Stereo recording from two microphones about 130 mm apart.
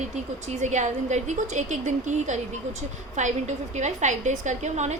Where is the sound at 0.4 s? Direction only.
65° right (ahead or behind).